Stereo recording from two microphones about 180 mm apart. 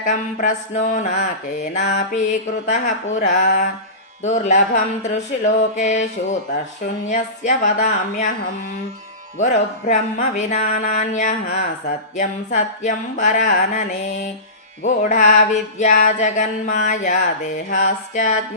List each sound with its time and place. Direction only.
0.0 s music: 45° left (ahead or behind)
7.1 s music: 40° left (ahead or behind)
9.4 s music: 40° left (ahead or behind)
14.8 s music: 45° left (ahead or behind)